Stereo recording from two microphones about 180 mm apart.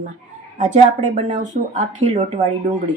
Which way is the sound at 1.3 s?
40° right (ahead or behind).